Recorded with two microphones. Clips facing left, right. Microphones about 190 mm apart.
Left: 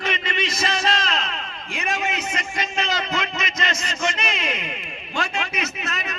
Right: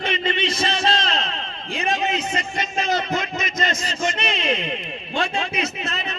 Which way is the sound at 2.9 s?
55° right (ahead or behind).